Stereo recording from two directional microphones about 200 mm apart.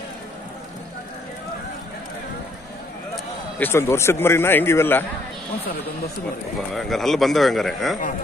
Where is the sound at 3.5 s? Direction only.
10° left (ahead or behind).